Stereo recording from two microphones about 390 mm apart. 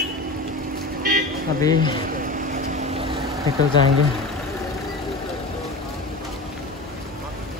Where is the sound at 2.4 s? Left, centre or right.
Right.